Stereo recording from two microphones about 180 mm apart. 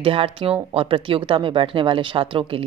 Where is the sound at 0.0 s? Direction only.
30° right (ahead or behind).